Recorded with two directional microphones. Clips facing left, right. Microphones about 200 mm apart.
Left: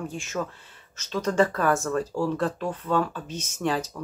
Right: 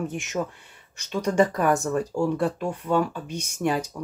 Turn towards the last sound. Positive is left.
turn(degrees=-10)  # may be behind; listen again after turning